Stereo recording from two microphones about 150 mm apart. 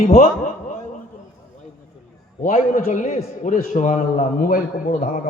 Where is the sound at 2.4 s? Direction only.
60° left (ahead or behind).